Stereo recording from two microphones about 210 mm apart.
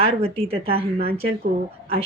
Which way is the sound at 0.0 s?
30° right (ahead or behind).